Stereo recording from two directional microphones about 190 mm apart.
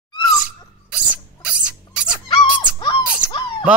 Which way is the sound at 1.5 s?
5° right (ahead or behind).